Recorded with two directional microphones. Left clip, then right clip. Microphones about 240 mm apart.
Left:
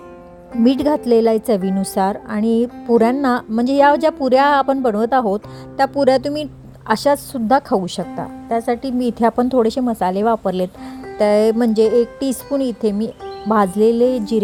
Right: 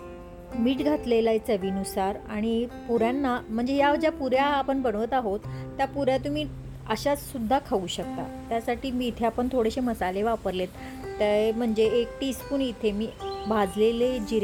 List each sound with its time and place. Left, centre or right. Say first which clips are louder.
0.6 s speech: left 10 dB; left